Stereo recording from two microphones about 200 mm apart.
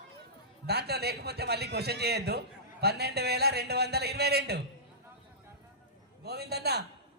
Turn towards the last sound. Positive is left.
turn(degrees=-55)  # may be behind; listen again after turning